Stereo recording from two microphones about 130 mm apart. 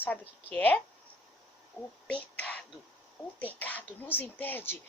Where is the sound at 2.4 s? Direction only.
10° left (ahead or behind).